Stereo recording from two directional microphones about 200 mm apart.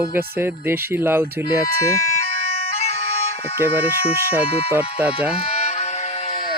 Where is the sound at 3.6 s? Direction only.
10° right (ahead or behind).